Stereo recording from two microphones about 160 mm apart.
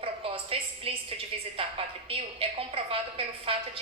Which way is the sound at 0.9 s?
35° right (ahead or behind).